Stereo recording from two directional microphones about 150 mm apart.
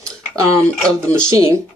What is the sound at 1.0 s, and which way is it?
Speech, 20° right (ahead or behind).